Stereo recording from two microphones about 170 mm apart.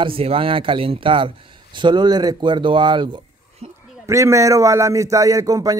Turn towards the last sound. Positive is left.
turn(degrees=-20)  # may be behind; listen again after turning